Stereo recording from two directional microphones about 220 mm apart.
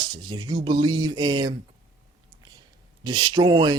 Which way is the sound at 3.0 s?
20° right (ahead or behind).